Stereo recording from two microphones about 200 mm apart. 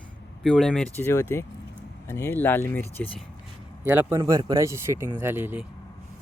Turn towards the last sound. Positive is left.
turn(degrees=-10)  # may be behind; listen again after turning